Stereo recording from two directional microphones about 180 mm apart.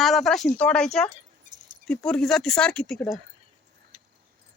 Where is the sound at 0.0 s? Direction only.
Centre (ahead or behind).